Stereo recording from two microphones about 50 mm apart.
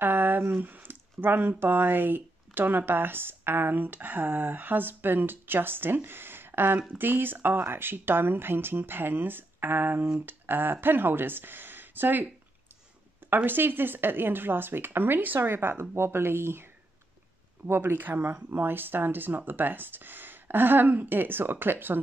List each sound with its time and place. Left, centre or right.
0.0 s speech: right
13.3 s speech: right
17.6 s speech: right